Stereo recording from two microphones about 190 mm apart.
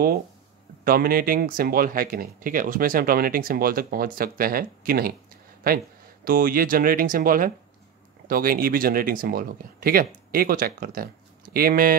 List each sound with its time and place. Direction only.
0.8 s speech: 50° right (ahead or behind)
6.2 s speech: 50° right (ahead or behind)